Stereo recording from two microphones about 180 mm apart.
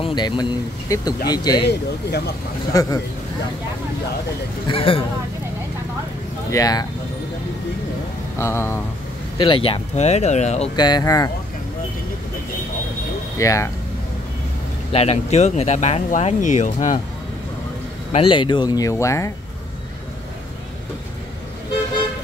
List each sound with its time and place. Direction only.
0.0 s speech: 25° left (ahead or behind)
1.7 s speech: 65° left (ahead or behind)
2.7 s speech: 20° left (ahead or behind)
4.6 s speech: 30° left (ahead or behind)
6.5 s speech: 20° left (ahead or behind)
8.4 s speech: 15° left (ahead or behind)
9.4 s speech: 30° left (ahead or behind)
10.8 s speech: 20° left (ahead or behind)
13.4 s speech: 15° left (ahead or behind)
14.9 s speech: 35° left (ahead or behind)
18.1 s speech: 30° left (ahead or behind)